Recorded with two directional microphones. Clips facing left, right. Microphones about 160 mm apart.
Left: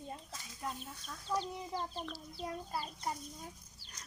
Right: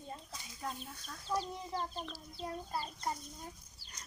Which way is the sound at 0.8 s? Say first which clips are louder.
Even; centre (ahead or behind).